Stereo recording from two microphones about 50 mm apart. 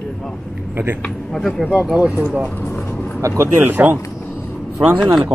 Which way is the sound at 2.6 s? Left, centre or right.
Left.